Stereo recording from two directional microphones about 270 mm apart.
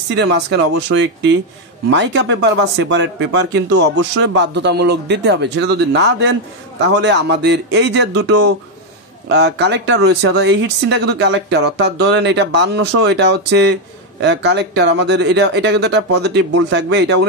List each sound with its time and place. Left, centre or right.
0.1 s speech: right